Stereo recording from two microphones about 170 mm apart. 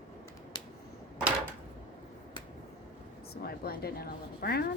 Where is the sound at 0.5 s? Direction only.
25° left (ahead or behind).